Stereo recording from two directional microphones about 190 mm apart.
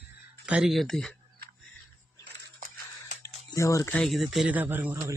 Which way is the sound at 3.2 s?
15° left (ahead or behind).